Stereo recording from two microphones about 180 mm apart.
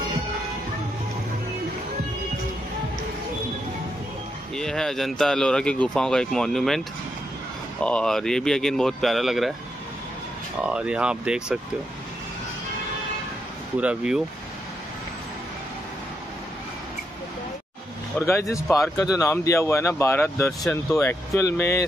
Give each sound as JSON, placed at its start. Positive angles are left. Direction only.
{"t": 4.6, "sound": "speech", "side_deg": 5}
{"t": 7.8, "sound": "speech", "side_deg": 5}
{"t": 10.6, "sound": "speech", "side_deg": -5}
{"t": 13.7, "sound": "speech", "side_deg": -5}
{"t": 18.2, "sound": "speech", "side_deg": 15}